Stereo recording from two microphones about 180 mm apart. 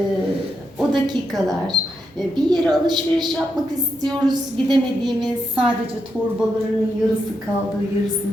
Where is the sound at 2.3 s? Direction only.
25° right (ahead or behind).